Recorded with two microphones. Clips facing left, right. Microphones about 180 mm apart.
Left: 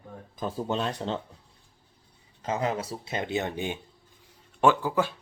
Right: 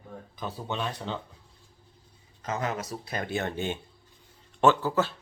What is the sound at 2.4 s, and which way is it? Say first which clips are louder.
Speech: left 3 dB; 30° left (ahead or behind).